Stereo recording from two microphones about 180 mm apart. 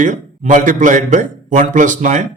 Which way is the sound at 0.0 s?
45° right (ahead or behind).